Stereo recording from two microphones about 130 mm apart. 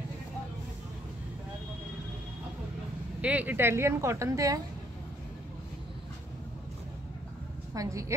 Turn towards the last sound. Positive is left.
turn(degrees=-25)  # may be behind; listen again after turning